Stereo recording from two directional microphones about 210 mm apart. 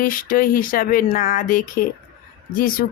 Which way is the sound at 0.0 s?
40° left (ahead or behind).